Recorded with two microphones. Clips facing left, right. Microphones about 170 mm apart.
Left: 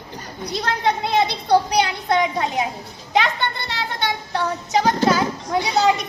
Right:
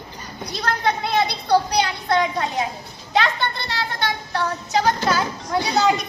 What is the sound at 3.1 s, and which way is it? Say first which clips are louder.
Child singing: left 1 dB; 20° left (ahead or behind).